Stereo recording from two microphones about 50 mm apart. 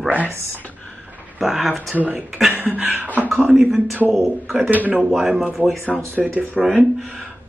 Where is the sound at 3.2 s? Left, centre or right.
Centre.